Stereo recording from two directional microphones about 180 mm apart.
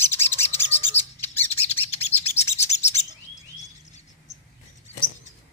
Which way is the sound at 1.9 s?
35° left (ahead or behind).